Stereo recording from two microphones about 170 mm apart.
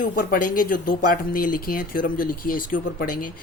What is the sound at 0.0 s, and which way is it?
Speech, 55° left (ahead or behind).